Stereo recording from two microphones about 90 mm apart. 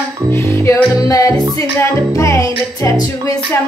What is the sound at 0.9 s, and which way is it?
Music, 45° left (ahead or behind).